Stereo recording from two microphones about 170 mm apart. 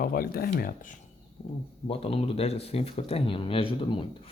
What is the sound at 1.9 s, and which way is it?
Speech, 35° left (ahead or behind).